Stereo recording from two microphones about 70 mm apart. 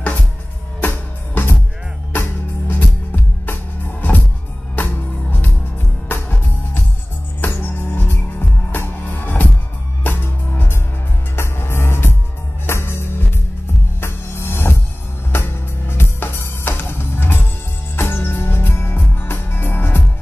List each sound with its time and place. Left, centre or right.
0.7 s music: left